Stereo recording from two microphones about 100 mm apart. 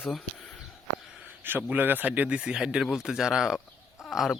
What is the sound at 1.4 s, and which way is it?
Speech, 20° right (ahead or behind).